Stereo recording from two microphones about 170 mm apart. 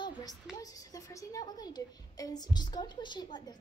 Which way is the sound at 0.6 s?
20° left (ahead or behind).